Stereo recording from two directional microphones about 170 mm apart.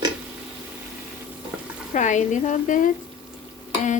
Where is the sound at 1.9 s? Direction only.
45° left (ahead or behind).